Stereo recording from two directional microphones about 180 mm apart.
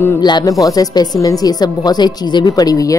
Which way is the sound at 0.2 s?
25° left (ahead or behind).